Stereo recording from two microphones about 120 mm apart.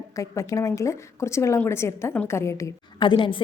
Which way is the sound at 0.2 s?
25° left (ahead or behind).